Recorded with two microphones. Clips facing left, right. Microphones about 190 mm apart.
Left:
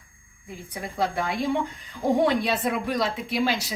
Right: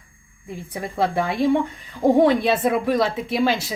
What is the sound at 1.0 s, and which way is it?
A woman's voice, 55° right (ahead or behind).